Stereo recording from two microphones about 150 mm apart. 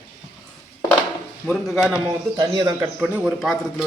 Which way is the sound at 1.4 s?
5° left (ahead or behind).